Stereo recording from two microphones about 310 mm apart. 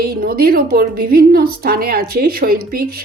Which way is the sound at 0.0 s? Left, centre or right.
Right.